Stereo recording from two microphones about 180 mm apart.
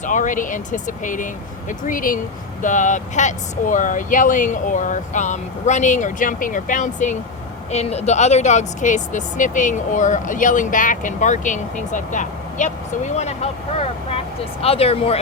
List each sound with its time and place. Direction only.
0.0 s speech: 45° left (ahead or behind)